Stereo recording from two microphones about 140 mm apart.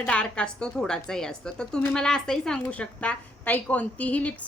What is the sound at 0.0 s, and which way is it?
A woman's voice, 5° left (ahead or behind).